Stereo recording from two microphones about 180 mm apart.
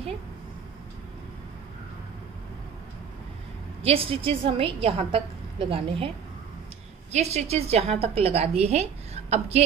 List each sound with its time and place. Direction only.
3.8 s a woman's voice: 30° right (ahead or behind)